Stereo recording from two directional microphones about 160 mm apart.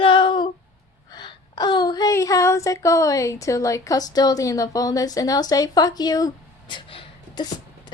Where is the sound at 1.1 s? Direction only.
25° left (ahead or behind).